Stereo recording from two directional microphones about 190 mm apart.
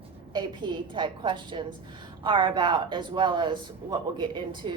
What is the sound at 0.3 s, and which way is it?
Speech, 25° right (ahead or behind).